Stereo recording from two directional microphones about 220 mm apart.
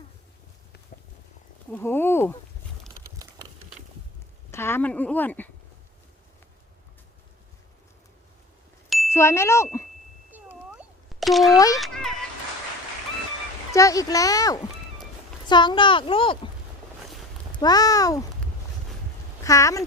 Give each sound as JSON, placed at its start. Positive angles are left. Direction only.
{"t": 1.7, "sound": "speech", "side_deg": 10}
{"t": 4.5, "sound": "speech", "side_deg": 10}
{"t": 9.1, "sound": "speech", "side_deg": 10}
{"t": 10.3, "sound": "cat", "side_deg": -5}
{"t": 11.5, "sound": "speech", "side_deg": 15}
{"t": 11.8, "sound": "a sound", "side_deg": 0}
{"t": 13.7, "sound": "speech", "side_deg": 15}
{"t": 17.5, "sound": "speech", "side_deg": 20}
{"t": 19.5, "sound": "speech", "side_deg": 15}